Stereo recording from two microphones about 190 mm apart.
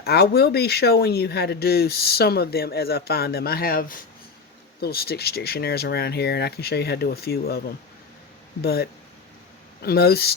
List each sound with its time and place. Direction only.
0.0 s speech: 55° left (ahead or behind)
8.6 s speech: 55° left (ahead or behind)